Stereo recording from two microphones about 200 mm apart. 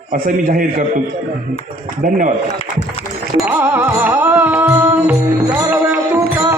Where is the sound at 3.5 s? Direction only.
5° right (ahead or behind).